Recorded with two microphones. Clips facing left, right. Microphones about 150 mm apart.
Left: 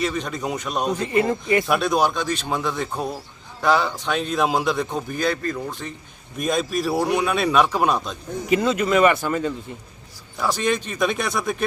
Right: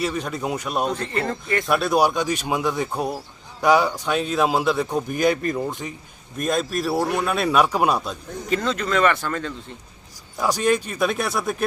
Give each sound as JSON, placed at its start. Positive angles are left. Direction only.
{"t": 0.0, "sound": "speech", "side_deg": -5}
{"t": 0.9, "sound": "speech", "side_deg": 10}
{"t": 6.3, "sound": "speech", "side_deg": 0}
{"t": 8.4, "sound": "a man's voice", "side_deg": 10}
{"t": 10.4, "sound": "speech", "side_deg": -10}